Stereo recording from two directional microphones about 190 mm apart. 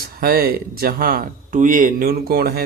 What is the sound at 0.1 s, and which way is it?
Speech, 50° right (ahead or behind).